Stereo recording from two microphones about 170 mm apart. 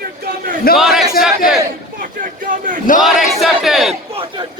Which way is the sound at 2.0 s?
55° right (ahead or behind).